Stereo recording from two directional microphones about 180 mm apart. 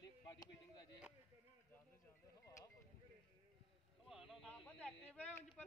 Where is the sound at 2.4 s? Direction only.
20° left (ahead or behind).